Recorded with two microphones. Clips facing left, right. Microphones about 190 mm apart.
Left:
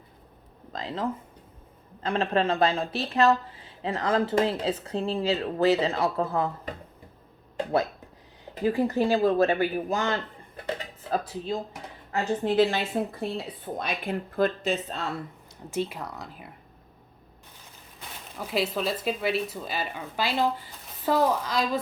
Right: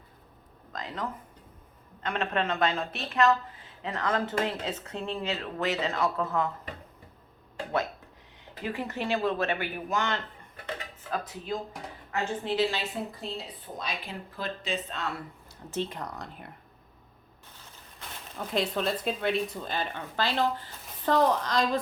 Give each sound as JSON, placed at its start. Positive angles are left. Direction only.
{"t": 0.7, "sound": "speech", "side_deg": 30}
{"t": 8.6, "sound": "speech", "side_deg": 35}
{"t": 12.5, "sound": "a woman's voice", "side_deg": 50}
{"t": 15.7, "sound": "speech", "side_deg": 10}
{"t": 18.3, "sound": "speech", "side_deg": 5}